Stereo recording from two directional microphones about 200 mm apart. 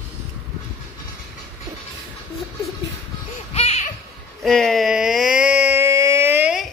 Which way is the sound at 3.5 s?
30° left (ahead or behind).